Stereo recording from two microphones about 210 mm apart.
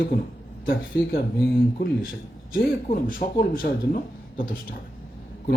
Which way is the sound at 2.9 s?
40° left (ahead or behind).